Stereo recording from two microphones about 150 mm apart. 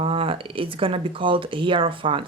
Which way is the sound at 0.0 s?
40° right (ahead or behind).